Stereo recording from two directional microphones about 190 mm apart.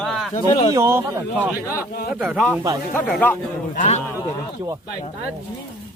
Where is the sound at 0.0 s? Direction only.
Centre (ahead or behind).